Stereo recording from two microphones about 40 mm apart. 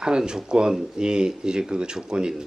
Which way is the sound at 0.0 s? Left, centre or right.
Right.